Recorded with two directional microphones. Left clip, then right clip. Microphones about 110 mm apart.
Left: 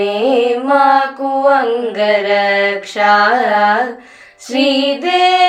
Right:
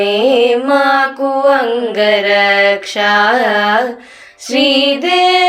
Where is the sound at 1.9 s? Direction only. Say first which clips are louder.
Right 4 dB; 25° right (ahead or behind).